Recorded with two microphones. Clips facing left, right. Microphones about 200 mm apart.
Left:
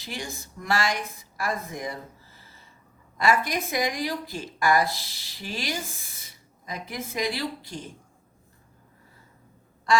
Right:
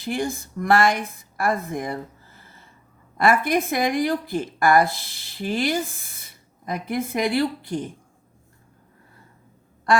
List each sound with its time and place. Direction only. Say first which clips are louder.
0.0 s speech: right 10 dB; 55° right (ahead or behind)
9.9 s quack: right 2 dB; 55° right (ahead or behind)